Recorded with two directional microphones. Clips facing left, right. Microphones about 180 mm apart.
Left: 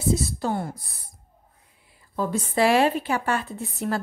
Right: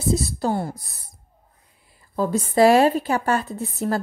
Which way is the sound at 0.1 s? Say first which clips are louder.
Right 3 dB; 35° right (ahead or behind).